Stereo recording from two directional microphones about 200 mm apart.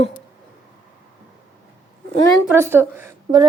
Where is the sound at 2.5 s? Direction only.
10° right (ahead or behind).